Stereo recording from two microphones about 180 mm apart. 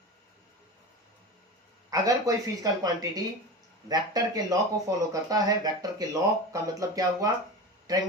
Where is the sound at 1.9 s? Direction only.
20° right (ahead or behind).